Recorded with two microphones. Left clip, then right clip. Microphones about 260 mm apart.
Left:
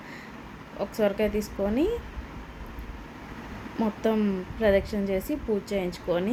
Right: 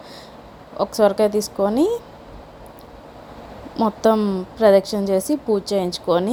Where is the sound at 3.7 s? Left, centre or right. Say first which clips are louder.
Right 10 dB; right.